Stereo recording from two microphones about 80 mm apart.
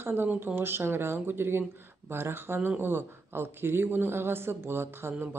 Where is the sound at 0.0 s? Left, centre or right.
Right.